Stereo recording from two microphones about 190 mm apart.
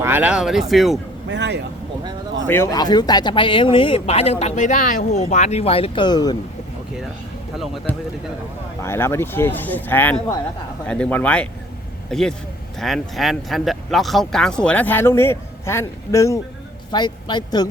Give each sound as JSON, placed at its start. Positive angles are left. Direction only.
{"t": 0.0, "sound": "speech", "side_deg": -10}
{"t": 1.3, "sound": "speech", "side_deg": -65}
{"t": 2.5, "sound": "speech", "side_deg": 15}
{"t": 7.9, "sound": "speech", "side_deg": 10}